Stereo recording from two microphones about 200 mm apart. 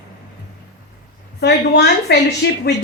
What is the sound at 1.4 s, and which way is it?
A woman's voice, 55° left (ahead or behind).